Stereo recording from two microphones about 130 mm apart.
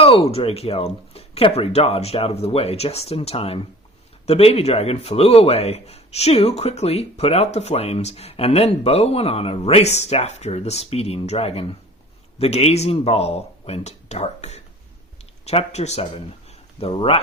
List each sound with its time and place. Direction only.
0.0 s a man's voice: 50° left (ahead or behind)
16.8 s a man's voice: 45° left (ahead or behind)